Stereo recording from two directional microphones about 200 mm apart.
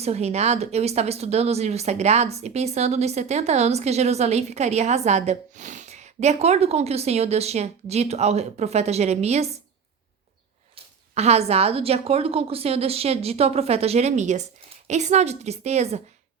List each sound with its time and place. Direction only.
0.0 s speech: 35° right (ahead or behind)
11.1 s speech: 30° right (ahead or behind)